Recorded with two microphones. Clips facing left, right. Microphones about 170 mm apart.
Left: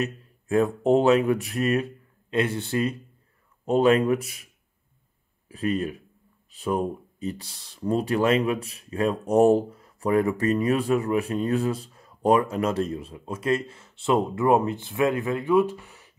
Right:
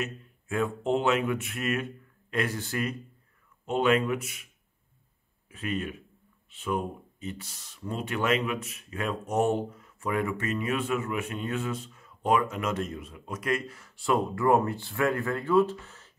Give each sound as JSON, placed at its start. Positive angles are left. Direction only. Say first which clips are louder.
{"t": 0.0, "sound": "speech", "louder": "left 5 dB", "side_deg": 35}
{"t": 5.5, "sound": "speech", "louder": "left 6 dB", "side_deg": 35}